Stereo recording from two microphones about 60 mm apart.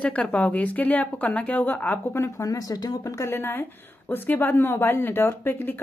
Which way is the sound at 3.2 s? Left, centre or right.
Left.